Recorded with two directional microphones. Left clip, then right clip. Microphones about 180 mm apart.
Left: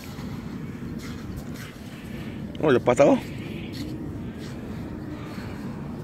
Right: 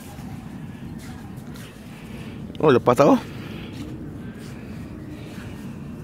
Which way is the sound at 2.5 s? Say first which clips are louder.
Right 3 dB; 40° right (ahead or behind).